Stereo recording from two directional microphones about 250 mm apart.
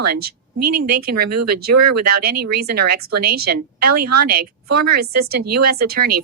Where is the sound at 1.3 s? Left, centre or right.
Right.